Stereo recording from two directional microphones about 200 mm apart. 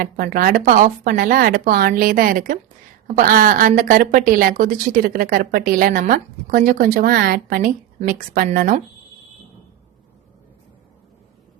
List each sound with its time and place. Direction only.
0.0 s a woman's voice: 45° right (ahead or behind)